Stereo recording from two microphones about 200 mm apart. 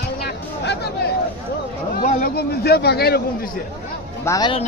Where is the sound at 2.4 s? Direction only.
55° left (ahead or behind).